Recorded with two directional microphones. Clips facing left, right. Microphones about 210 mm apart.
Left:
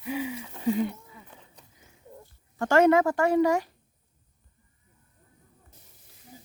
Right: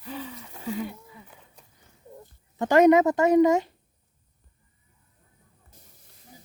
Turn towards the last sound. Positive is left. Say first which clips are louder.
# left 2 dB
turn(degrees=-15)  # may be behind; listen again after turning